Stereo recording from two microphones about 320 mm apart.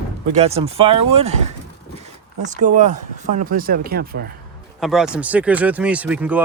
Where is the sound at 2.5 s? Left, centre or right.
Right.